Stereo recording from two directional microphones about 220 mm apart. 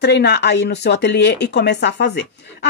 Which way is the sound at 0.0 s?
50° left (ahead or behind).